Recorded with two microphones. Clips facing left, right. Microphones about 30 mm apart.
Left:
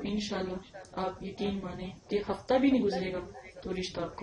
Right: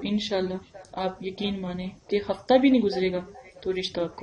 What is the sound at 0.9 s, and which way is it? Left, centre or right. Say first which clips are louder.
Speech: right 5 dB; right.